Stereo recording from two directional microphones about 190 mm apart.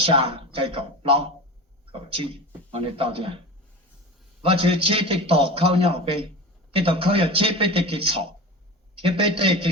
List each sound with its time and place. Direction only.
0.0 s a man's voice: 30° right (ahead or behind)
4.4 s a man's voice: 30° right (ahead or behind)